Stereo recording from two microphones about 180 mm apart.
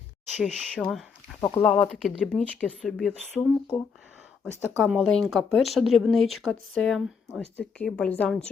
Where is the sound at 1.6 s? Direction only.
10° left (ahead or behind).